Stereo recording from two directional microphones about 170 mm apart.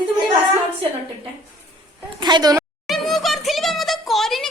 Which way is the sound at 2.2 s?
25° right (ahead or behind).